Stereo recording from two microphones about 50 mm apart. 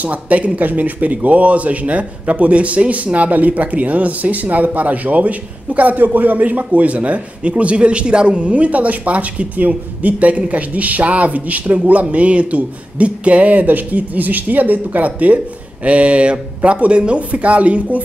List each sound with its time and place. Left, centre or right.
0.0 s a man's voice: right